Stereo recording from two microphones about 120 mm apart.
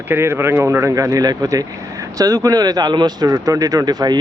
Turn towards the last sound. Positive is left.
turn(degrees=-35)  # may be behind; listen again after turning